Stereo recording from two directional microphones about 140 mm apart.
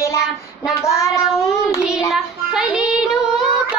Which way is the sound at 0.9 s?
20° left (ahead or behind).